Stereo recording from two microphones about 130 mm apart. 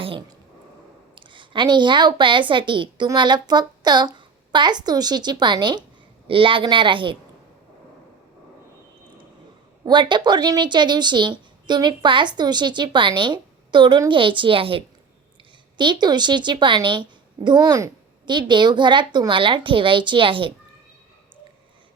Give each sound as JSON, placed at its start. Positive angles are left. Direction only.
{"t": 0.0, "sound": "a sound", "side_deg": -40}
{"t": 1.1, "sound": "a woman's voice", "side_deg": -40}
{"t": 9.8, "sound": "a woman's voice", "side_deg": -35}